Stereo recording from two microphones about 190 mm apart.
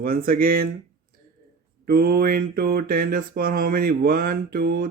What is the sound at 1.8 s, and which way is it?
Mantra, 55° right (ahead or behind).